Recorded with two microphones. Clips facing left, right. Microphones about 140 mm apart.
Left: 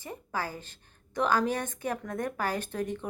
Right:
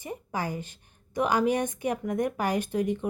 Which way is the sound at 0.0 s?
15° right (ahead or behind).